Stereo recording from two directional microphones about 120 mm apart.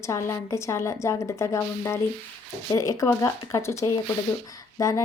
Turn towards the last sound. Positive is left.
turn(degrees=25)  # may be behind; listen again after turning